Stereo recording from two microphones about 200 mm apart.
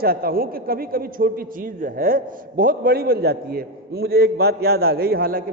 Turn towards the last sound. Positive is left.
turn(degrees=-45)  # may be behind; listen again after turning